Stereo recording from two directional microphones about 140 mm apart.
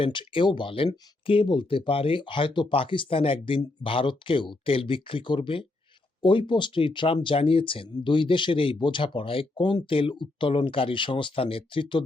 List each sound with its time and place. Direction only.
0.0 s speech: 35° left (ahead or behind)